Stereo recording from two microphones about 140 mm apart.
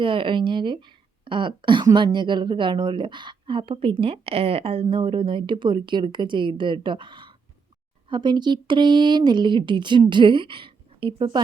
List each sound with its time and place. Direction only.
0.0 s speech: 35° right (ahead or behind)